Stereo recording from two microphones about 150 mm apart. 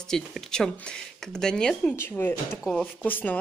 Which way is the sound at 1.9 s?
15° left (ahead or behind).